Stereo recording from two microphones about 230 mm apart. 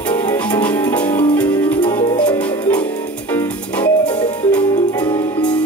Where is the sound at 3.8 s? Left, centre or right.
Centre.